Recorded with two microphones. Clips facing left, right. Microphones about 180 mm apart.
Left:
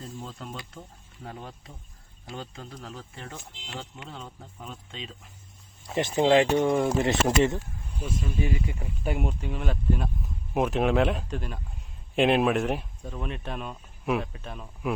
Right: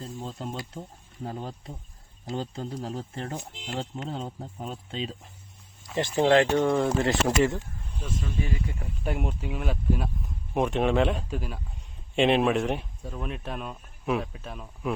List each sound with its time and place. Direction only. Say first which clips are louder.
0.0 s insect: right 3 dB; 30° right (ahead or behind)
0.7 s speech: right 5 dB; 30° right (ahead or behind)
5.9 s speech: even; 20° left (ahead or behind)
7.9 s speech: left 2 dB; 10° left (ahead or behind)